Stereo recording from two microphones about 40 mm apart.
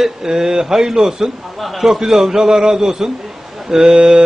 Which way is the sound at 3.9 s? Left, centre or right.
Right.